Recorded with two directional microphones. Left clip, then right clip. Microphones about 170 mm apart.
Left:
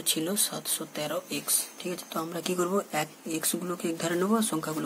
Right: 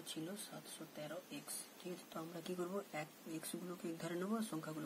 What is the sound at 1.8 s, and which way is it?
Speech, 10° left (ahead or behind).